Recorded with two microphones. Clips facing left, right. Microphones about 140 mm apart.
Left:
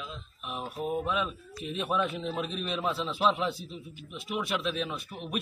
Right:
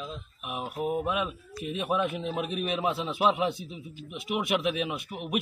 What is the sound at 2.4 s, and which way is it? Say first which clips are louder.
Speech: right 4 dB; 65° right (ahead or behind).